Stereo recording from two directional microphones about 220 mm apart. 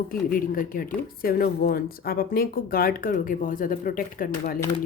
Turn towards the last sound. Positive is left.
turn(degrees=40)  # may be behind; listen again after turning